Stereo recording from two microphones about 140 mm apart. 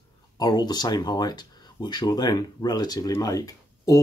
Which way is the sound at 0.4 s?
30° left (ahead or behind).